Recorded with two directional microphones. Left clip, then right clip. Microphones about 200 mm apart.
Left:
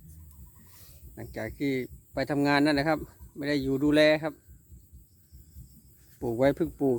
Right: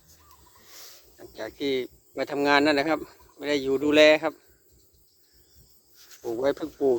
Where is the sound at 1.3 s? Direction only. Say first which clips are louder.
Right 3 dB; 5° left (ahead or behind).